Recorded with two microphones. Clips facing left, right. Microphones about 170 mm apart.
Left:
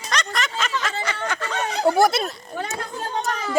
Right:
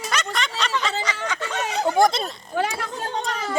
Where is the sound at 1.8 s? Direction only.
5° left (ahead or behind).